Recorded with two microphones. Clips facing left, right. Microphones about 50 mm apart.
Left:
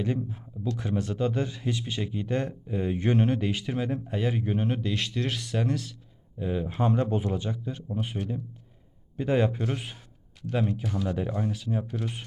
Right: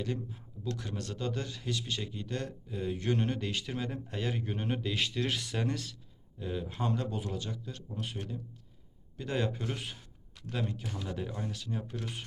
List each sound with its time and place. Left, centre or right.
0.0 s speech: centre
3.2 s speech: centre
6.4 s speech: centre
11.1 s speech: centre